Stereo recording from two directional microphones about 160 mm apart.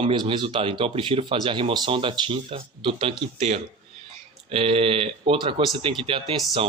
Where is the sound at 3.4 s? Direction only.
45° right (ahead or behind).